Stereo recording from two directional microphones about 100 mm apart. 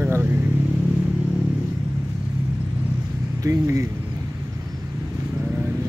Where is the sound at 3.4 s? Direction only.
30° right (ahead or behind).